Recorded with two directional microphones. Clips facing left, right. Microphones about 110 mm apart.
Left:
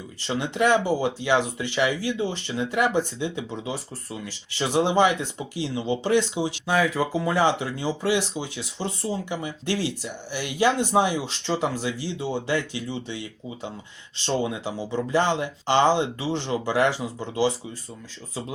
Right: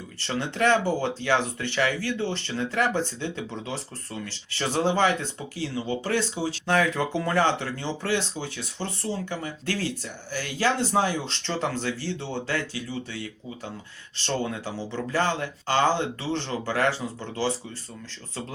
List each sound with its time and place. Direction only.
0.2 s speech: 15° left (ahead or behind)
6.7 s speech: 5° left (ahead or behind)